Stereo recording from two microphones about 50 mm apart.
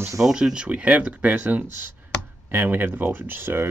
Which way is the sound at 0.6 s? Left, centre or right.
Right.